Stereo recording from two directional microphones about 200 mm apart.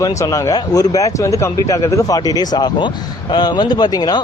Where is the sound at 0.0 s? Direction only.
15° left (ahead or behind).